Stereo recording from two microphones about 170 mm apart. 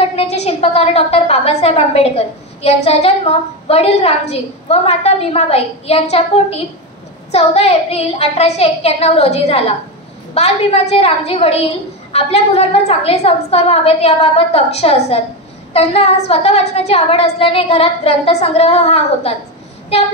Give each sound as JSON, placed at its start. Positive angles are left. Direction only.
{"t": 0.0, "sound": "a woman's voice", "side_deg": 35}